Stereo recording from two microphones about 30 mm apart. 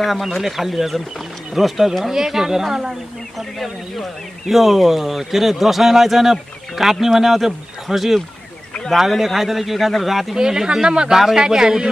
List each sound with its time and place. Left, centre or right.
0.4 s speech: centre
3.3 s speech: centre
10.3 s speech: right